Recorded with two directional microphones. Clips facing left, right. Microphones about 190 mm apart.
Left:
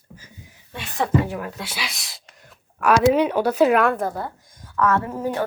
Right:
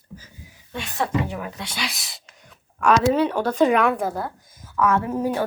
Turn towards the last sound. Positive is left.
turn(degrees=-15)  # may be behind; listen again after turning